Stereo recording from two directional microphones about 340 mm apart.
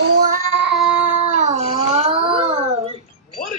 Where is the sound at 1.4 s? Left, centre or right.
Centre.